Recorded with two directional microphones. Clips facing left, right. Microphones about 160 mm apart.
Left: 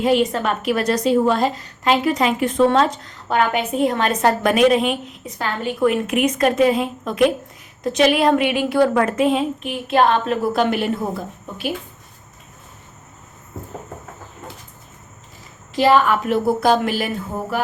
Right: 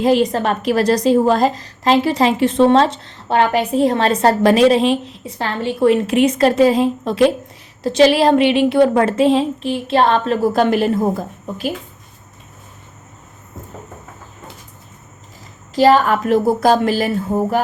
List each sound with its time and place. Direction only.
0.0 s a woman's voice: 35° right (ahead or behind)
15.7 s a woman's voice: 40° right (ahead or behind)